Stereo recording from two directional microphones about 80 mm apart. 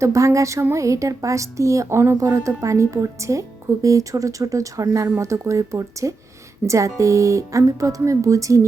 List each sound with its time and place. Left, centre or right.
0.0 s a woman's voice: right